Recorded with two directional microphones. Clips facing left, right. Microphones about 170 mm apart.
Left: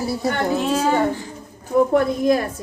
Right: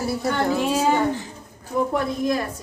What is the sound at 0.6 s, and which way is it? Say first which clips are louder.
Speech: left 1 dB; 10° right (ahead or behind).